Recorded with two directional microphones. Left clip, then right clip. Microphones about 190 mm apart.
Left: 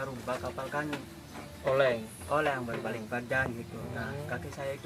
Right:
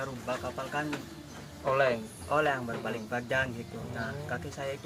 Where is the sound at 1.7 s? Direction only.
5° left (ahead or behind).